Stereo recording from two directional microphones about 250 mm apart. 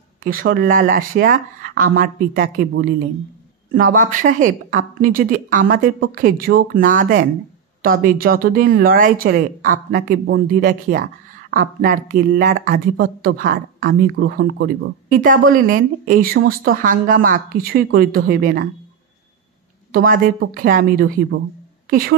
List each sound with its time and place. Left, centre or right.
0.2 s speech: right
19.9 s a woman's voice: right